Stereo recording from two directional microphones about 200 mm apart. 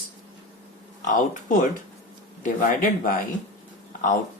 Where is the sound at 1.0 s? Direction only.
40° left (ahead or behind).